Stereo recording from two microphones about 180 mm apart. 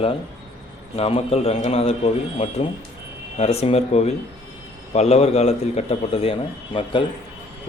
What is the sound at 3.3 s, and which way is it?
A man's voice, 35° left (ahead or behind).